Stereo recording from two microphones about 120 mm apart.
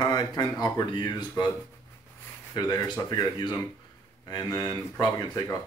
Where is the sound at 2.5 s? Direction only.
35° left (ahead or behind).